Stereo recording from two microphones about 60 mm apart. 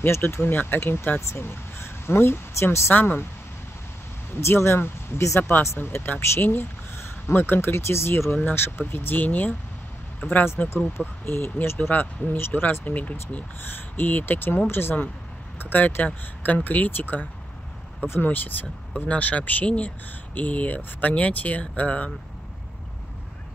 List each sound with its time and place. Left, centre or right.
0.0 s speech: left
1.2 s speech: left
2.9 s speech: left
4.4 s speech: left
11.9 s speech: left
12.4 s speech: left
12.8 s speech: left